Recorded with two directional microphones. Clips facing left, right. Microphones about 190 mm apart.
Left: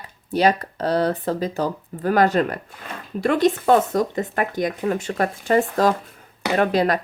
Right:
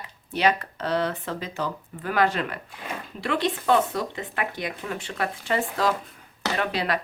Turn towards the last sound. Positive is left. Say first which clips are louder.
# left 8 dB
turn(degrees=45)  # may be behind; listen again after turning